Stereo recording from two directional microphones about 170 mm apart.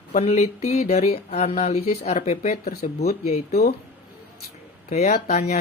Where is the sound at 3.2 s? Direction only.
40° left (ahead or behind).